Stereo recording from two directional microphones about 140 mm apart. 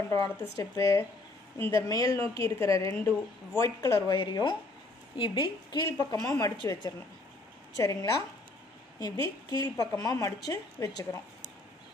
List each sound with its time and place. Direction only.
0.6 s a woman's voice: 20° left (ahead or behind)
6.5 s a woman's voice: 35° left (ahead or behind)